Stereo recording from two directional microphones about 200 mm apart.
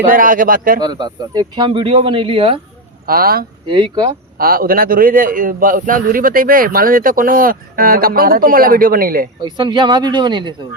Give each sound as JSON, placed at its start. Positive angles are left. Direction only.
{"t": 0.1, "sound": "a man's voice", "side_deg": -45}
{"t": 0.8, "sound": "speech", "side_deg": -20}
{"t": 3.1, "sound": "a man's voice", "side_deg": -50}
{"t": 3.7, "sound": "speech", "side_deg": -20}
{"t": 4.4, "sound": "a man's voice", "side_deg": -45}
{"t": 9.4, "sound": "speech", "side_deg": -20}